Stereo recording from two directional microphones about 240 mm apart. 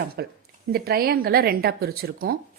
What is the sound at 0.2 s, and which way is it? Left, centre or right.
Speech, right.